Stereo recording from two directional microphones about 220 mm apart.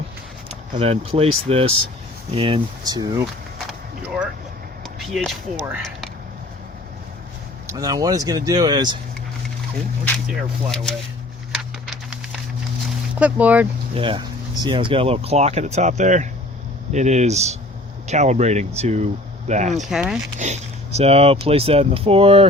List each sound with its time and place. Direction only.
0.4 s speech: 25° right (ahead or behind)
3.7 s vehicle: 5° right (ahead or behind)
4.8 s a sound: centre (ahead or behind)
5.6 s speech: 5° right (ahead or behind)
7.7 s speech: 15° right (ahead or behind)
10.2 s speech: centre (ahead or behind)
13.1 s speech: 5° right (ahead or behind)
13.9 s speech: 25° right (ahead or behind)
19.8 s speech: centre (ahead or behind)
20.4 s speech: 30° right (ahead or behind)